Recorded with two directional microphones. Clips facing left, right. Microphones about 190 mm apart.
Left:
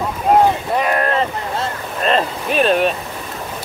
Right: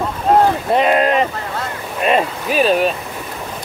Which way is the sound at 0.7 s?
20° right (ahead or behind).